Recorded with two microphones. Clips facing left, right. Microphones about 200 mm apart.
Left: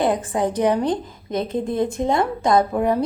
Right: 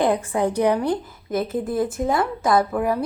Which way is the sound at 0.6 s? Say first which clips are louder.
Left 2 dB; 20° left (ahead or behind).